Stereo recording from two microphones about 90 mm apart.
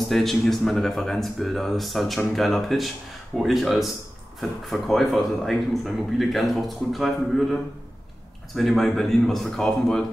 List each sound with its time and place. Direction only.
0.1 s a man's voice: centre (ahead or behind)
8.5 s a man's voice: 5° left (ahead or behind)